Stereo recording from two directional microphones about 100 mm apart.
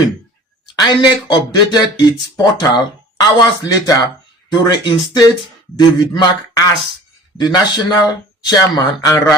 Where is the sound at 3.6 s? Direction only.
40° left (ahead or behind).